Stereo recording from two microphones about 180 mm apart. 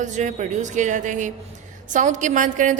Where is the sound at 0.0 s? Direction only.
40° right (ahead or behind).